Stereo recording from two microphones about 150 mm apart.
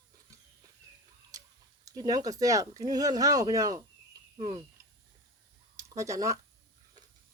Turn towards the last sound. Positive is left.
turn(degrees=-20)  # may be behind; listen again after turning